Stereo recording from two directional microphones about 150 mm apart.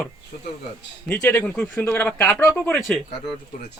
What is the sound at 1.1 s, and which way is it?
Speech, 10° left (ahead or behind).